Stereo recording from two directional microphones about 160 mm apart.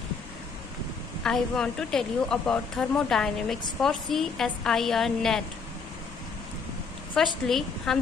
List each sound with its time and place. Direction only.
1.2 s a woman's voice: 5° left (ahead or behind)
7.4 s a woman's voice: centre (ahead or behind)